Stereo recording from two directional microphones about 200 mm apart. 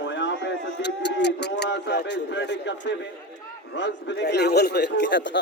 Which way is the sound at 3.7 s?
60° left (ahead or behind).